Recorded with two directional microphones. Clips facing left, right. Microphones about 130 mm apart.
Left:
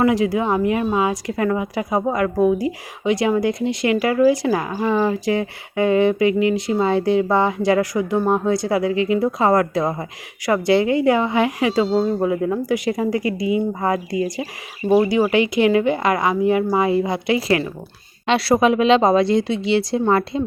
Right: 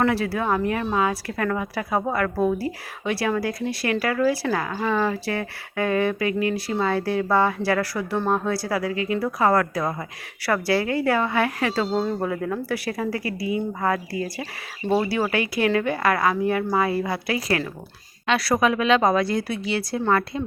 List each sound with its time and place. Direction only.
0.0 s speech: 15° left (ahead or behind)